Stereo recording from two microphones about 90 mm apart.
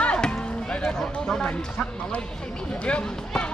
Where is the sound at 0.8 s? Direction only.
5° left (ahead or behind).